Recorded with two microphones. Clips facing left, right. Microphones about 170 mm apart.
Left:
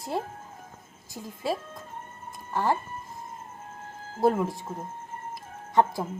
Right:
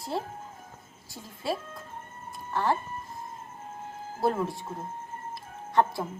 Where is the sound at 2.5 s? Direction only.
15° left (ahead or behind).